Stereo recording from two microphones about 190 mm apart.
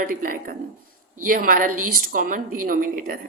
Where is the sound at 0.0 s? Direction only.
45° right (ahead or behind).